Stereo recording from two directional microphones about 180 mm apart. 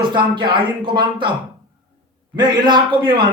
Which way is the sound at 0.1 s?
25° right (ahead or behind).